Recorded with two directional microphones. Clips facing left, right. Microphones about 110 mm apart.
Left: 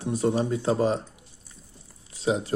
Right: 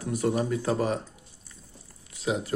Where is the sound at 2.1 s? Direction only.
35° left (ahead or behind).